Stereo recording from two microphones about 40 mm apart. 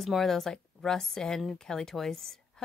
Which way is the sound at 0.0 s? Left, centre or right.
Centre.